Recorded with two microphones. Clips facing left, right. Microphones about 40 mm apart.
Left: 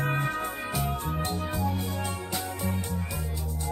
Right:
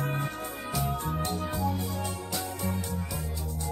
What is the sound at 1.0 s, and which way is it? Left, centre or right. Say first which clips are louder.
Music: even; centre.